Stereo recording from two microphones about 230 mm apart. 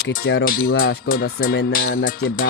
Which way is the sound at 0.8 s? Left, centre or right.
Left.